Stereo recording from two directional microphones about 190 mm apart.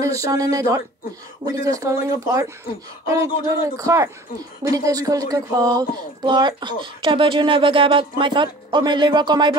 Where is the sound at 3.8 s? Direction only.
15° right (ahead or behind).